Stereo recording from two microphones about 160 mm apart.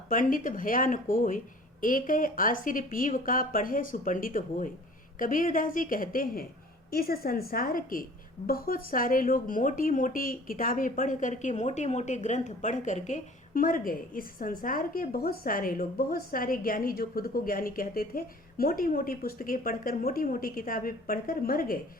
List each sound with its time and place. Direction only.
0.1 s speech: 55° left (ahead or behind)
6.9 s a woman's voice: 70° left (ahead or behind)